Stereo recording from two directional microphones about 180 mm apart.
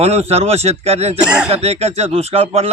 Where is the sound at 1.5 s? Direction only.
35° right (ahead or behind).